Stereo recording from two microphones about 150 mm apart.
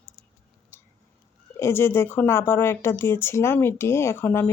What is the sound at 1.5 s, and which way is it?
Speech, 15° left (ahead or behind).